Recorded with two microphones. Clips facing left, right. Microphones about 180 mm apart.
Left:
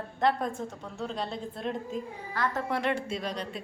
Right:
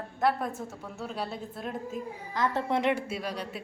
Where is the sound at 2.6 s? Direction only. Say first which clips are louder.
Right 4 dB; 20° right (ahead or behind).